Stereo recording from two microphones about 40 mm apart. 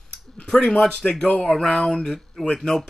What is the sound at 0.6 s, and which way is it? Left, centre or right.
Speech, left.